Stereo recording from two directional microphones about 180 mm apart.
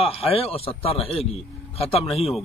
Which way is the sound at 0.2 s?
35° left (ahead or behind).